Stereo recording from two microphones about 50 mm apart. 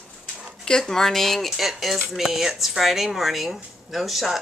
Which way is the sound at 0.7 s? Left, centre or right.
Centre.